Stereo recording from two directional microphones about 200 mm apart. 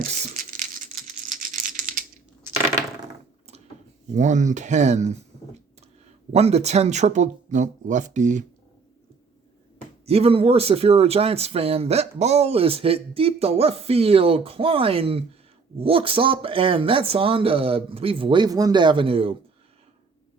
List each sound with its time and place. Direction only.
0.1 s rattle: 40° right (ahead or behind)
4.1 s speech: 35° right (ahead or behind)
6.3 s speech: 30° right (ahead or behind)
10.1 s speech: 30° right (ahead or behind)